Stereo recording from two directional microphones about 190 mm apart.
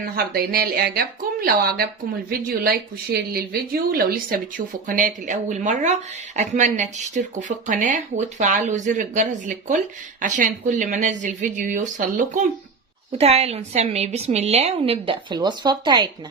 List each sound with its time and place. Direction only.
0.0 s a woman's voice: 55° right (ahead or behind); by 16.0 s 20° right (ahead or behind)